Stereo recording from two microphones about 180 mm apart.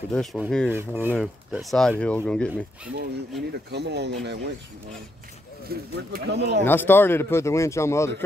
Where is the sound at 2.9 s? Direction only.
65° right (ahead or behind).